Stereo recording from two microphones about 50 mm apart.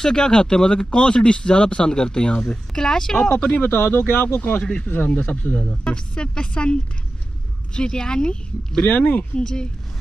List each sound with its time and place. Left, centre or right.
0.0 s speech: centre
3.4 s speech: left
3.7 s speech: left
4.4 s speech: left
8.8 s speech: left
9.4 s speech: centre